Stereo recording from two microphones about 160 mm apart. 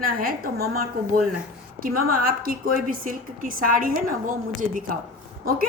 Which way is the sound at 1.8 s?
65° right (ahead or behind).